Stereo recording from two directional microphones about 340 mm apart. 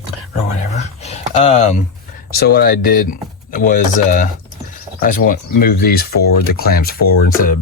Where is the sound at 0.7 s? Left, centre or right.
Centre.